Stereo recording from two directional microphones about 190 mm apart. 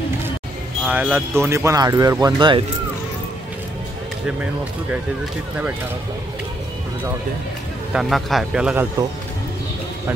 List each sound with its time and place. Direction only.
0.8 s speech: 10° right (ahead or behind); by 2.6 s 25° right (ahead or behind)
7.9 s a man's voice: centre (ahead or behind)